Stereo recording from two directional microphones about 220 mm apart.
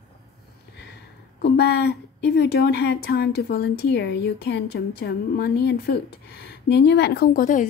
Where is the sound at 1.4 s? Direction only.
50° left (ahead or behind).